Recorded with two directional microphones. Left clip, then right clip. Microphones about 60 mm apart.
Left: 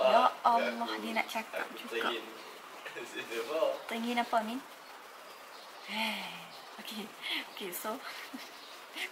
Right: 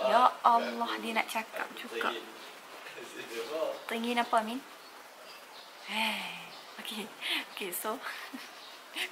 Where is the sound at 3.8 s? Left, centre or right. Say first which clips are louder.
Right 2 dB; centre.